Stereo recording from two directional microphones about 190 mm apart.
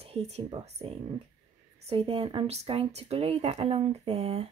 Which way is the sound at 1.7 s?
30° right (ahead or behind).